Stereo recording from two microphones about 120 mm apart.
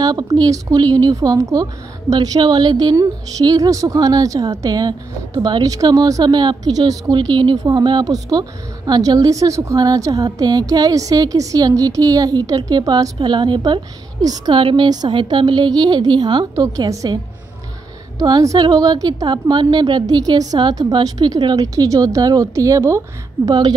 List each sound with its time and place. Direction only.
0.0 s a woman's voice: 35° right (ahead or behind)
16.6 s a woman's voice: 30° right (ahead or behind)
18.2 s a woman's voice: 30° right (ahead or behind)